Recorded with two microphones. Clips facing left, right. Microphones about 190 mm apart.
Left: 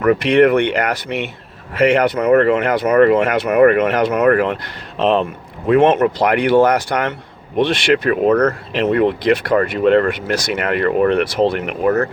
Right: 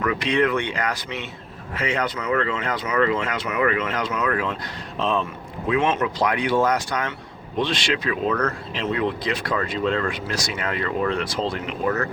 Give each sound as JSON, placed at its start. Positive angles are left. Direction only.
{"t": 0.0, "sound": "speech", "side_deg": 55}
{"t": 8.7, "sound": "speech", "side_deg": 60}